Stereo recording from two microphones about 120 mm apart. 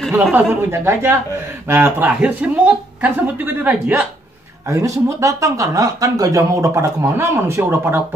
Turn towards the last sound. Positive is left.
turn(degrees=-20)  # may be behind; listen again after turning